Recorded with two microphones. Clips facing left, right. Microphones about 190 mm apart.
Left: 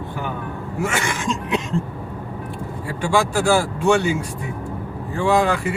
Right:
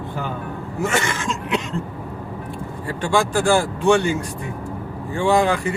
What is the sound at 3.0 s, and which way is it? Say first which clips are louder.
Speech: even; 10° left (ahead or behind).